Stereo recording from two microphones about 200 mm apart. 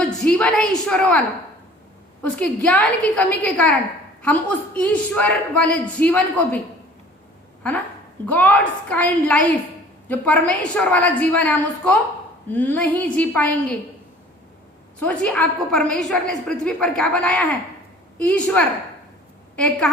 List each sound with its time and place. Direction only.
0.3 s a woman's voice: 5° left (ahead or behind)
2.2 s a man's voice: 5° left (ahead or behind)
8.3 s a man's voice: 10° left (ahead or behind)
14.9 s a woman's voice: 5° left (ahead or behind)